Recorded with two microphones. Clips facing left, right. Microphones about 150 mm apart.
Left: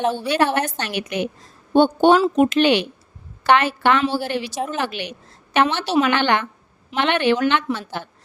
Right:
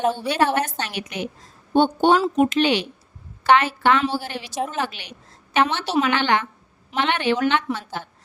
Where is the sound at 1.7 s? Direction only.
80° left.